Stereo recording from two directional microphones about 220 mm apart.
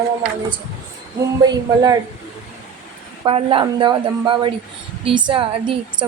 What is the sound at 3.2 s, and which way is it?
Speech, 25° right (ahead or behind).